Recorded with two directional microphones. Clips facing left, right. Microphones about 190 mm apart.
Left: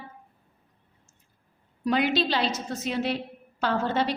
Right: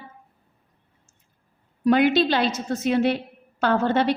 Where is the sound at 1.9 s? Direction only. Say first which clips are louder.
Right 6 dB; 55° right (ahead or behind).